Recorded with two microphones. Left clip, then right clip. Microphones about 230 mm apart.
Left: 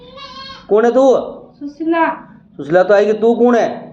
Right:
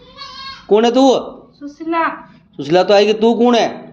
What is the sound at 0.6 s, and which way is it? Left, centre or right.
Speech, right.